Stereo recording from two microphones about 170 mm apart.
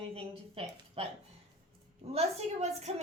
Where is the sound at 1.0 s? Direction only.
35° right (ahead or behind).